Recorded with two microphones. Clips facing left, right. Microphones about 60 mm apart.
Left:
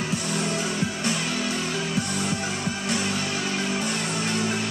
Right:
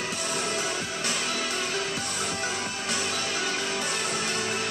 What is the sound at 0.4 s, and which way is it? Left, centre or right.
Music, left.